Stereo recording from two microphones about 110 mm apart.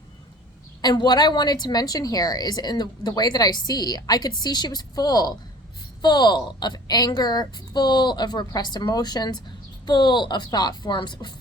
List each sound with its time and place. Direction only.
0.8 s a woman's voice: 40° left (ahead or behind)